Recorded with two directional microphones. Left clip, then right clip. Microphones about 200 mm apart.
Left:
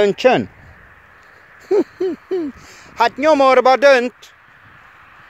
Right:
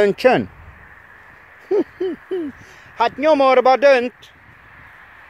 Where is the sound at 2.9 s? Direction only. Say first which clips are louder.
Left 2 dB; 20° left (ahead or behind).